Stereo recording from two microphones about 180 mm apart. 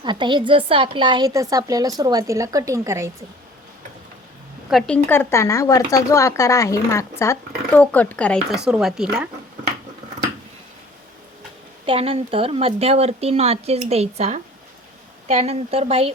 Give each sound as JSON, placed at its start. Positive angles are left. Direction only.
{"t": 0.0, "sound": "speech", "side_deg": -25}
{"t": 4.7, "sound": "speech", "side_deg": 5}
{"t": 11.9, "sound": "speech", "side_deg": -30}